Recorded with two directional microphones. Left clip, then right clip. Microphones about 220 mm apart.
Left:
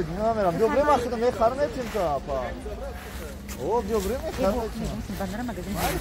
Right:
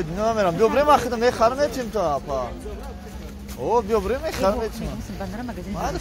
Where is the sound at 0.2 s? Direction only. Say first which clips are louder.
Right 3 dB; 30° right (ahead or behind).